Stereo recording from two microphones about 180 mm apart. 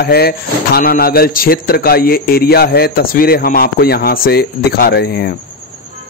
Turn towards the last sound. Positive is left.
turn(degrees=60)  # may be behind; listen again after turning